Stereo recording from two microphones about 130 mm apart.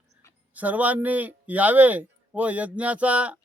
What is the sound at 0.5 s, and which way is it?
Speech, 10° right (ahead or behind).